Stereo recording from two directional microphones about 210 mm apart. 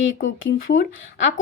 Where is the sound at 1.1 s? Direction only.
60° left (ahead or behind).